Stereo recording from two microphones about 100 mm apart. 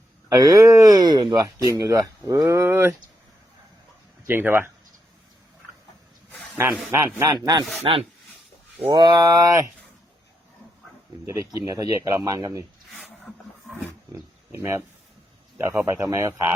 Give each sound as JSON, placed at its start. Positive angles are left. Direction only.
{"t": 0.3, "sound": "speech", "side_deg": -35}
{"t": 4.3, "sound": "speech", "side_deg": -20}
{"t": 6.9, "sound": "speech", "side_deg": -30}
{"t": 7.9, "sound": "a man's voice", "side_deg": -60}
{"t": 9.0, "sound": "speech", "side_deg": -45}
{"t": 9.2, "sound": "speech", "side_deg": -35}
{"t": 11.3, "sound": "speech", "side_deg": -30}
{"t": 14.1, "sound": "wild animals", "side_deg": -25}
{"t": 15.5, "sound": "speech", "side_deg": -25}